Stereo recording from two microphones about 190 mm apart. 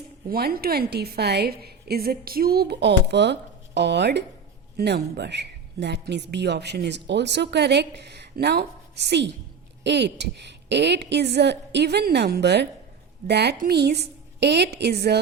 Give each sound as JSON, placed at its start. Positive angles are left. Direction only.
{"t": 0.3, "sound": "a woman's voice", "side_deg": -50}